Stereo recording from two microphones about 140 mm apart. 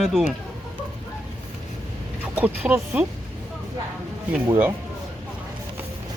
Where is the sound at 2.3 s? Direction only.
10° right (ahead or behind).